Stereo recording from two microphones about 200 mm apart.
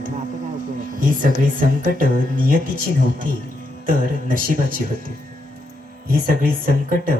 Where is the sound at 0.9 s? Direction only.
40° right (ahead or behind).